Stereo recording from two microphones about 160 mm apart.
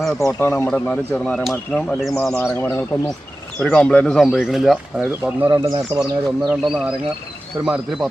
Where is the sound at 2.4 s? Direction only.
10° left (ahead or behind).